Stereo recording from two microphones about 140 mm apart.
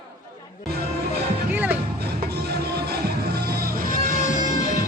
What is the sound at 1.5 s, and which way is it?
Music, 10° right (ahead or behind).